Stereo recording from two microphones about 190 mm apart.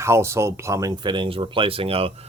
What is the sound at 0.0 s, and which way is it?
Speech, 15° right (ahead or behind).